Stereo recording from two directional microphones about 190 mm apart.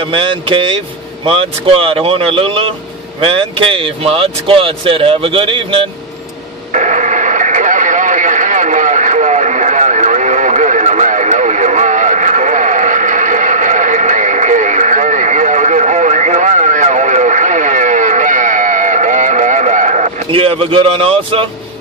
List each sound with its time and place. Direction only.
0.0 s speech: 25° right (ahead or behind)
6.7 s radio: 40° right (ahead or behind)